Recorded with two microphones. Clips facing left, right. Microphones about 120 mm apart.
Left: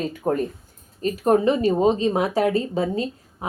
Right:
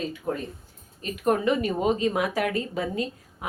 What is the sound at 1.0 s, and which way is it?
Speech, 35° left (ahead or behind).